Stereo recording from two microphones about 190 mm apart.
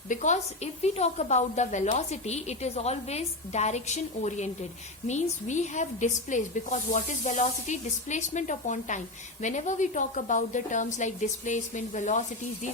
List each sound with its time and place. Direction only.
0.1 s a woman's voice: 40° left (ahead or behind)